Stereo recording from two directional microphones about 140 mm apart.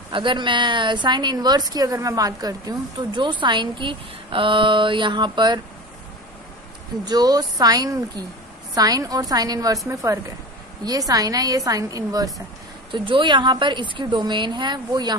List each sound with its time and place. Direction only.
0.1 s a woman's voice: 35° right (ahead or behind)
7.1 s a woman's voice: 25° right (ahead or behind)